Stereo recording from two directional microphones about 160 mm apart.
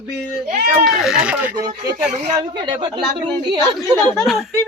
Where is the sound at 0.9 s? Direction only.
5° right (ahead or behind).